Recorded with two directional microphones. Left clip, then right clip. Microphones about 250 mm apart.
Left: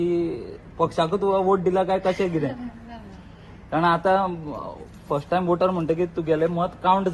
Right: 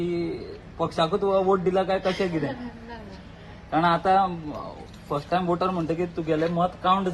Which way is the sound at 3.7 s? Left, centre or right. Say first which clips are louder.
Left 1 dB; left.